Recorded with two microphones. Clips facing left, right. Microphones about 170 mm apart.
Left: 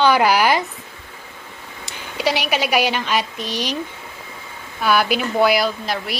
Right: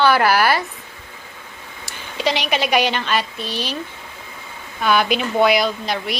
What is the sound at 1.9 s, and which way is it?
A woman's voice, 10° left (ahead or behind).